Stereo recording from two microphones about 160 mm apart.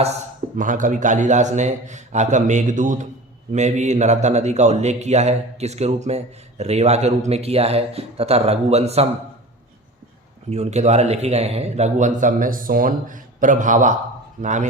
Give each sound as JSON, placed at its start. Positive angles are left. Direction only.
{"t": 0.5, "sound": "a man's voice", "side_deg": -55}
{"t": 10.5, "sound": "a man's voice", "side_deg": -45}